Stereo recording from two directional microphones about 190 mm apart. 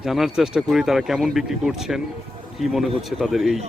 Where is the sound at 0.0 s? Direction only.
Centre (ahead or behind).